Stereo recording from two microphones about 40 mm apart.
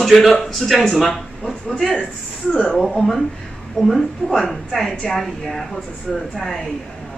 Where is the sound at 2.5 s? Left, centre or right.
Left.